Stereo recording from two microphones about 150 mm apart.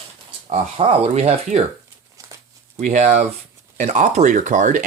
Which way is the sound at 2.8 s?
50° right (ahead or behind).